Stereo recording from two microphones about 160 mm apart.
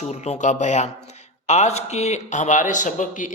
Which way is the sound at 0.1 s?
45° left (ahead or behind).